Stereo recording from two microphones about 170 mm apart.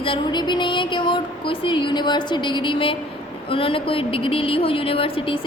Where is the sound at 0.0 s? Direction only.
30° left (ahead or behind).